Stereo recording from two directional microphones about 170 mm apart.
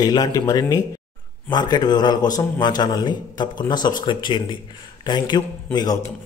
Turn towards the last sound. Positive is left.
turn(degrees=20)  # may be behind; listen again after turning